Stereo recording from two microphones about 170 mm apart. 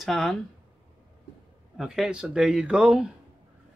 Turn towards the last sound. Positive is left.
turn(degrees=-5)  # may be behind; listen again after turning